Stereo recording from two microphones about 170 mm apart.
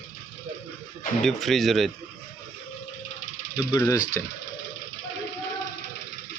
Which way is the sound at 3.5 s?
20° left (ahead or behind).